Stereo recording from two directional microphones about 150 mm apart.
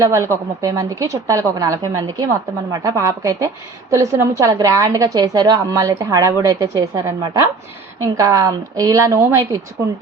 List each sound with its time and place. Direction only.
0.0 s a woman's voice: 20° right (ahead or behind)